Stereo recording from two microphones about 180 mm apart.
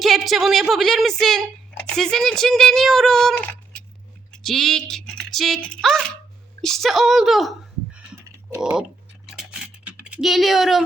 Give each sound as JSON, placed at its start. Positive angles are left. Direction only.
{"t": 0.0, "sound": "speech", "side_deg": 0}
{"t": 9.3, "sound": "typing", "side_deg": -5}